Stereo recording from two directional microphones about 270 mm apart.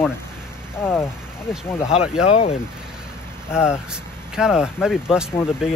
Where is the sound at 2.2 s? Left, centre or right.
Left.